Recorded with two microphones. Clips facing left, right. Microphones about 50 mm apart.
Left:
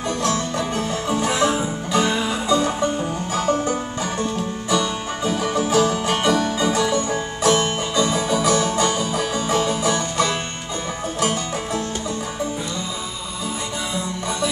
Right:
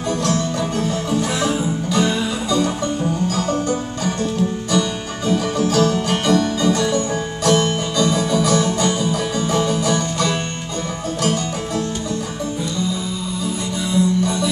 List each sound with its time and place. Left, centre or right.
0.1 s music: centre
13.9 s music: centre